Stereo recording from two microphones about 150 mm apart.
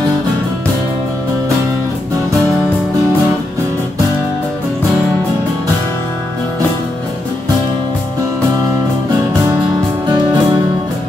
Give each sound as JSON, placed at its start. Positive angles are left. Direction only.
{"t": 10.0, "sound": "music", "side_deg": -30}